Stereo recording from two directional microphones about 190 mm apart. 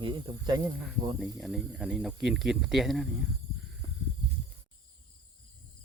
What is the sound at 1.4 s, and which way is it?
Speech, centre (ahead or behind).